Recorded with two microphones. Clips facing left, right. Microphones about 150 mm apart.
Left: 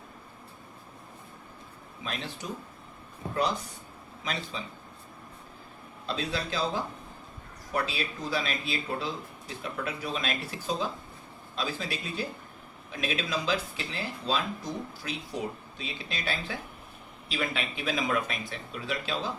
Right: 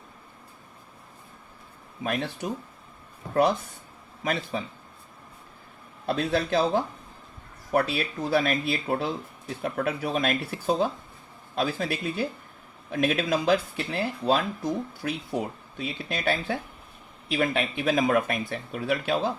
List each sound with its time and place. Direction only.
2.0 s speech: 60° right (ahead or behind)
4.2 s speech: 55° right (ahead or behind)
6.1 s speech: 55° right (ahead or behind)